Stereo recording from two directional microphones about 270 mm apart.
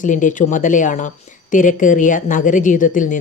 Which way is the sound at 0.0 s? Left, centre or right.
Left.